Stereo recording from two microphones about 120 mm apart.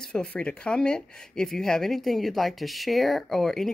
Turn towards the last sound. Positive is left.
turn(degrees=5)  # may be behind; listen again after turning